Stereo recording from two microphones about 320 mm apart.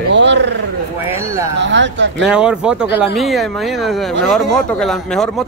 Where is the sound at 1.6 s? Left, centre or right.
Right.